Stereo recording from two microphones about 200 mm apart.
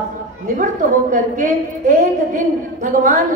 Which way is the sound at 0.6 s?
40° right (ahead or behind).